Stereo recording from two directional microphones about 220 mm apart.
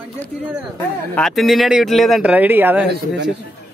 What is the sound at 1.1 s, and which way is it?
Speech, centre (ahead or behind).